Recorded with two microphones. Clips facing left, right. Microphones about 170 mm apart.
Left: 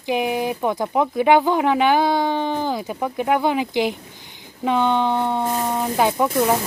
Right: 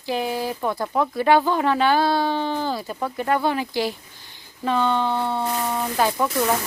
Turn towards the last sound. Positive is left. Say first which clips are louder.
# left 3 dB
turn(degrees=20)  # may be behind; listen again after turning